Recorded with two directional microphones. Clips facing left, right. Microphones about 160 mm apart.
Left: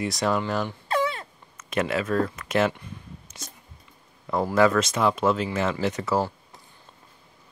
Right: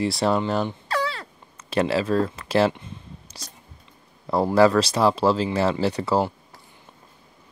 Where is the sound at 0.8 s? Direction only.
20° left (ahead or behind).